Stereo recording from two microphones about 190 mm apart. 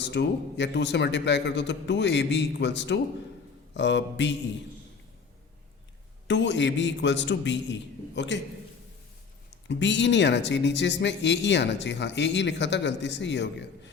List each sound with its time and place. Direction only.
0.0 s a man's voice: 65° left (ahead or behind)
6.2 s speech: 70° left (ahead or behind)
9.6 s speech: 70° left (ahead or behind)